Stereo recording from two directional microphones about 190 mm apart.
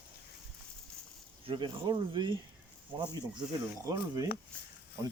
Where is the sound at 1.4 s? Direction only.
25° right (ahead or behind).